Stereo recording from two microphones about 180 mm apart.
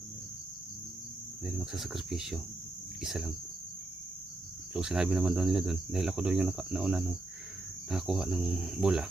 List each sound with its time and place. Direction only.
1.5 s cricket: 5° right (ahead or behind)
4.7 s cricket: 5° right (ahead or behind)